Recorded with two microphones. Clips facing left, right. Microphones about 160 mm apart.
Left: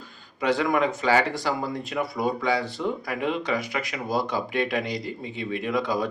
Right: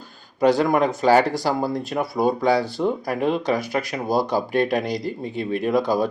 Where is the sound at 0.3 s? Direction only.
40° right (ahead or behind).